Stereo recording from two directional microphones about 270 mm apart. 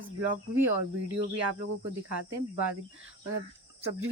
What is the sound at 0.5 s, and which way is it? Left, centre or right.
Speech, right.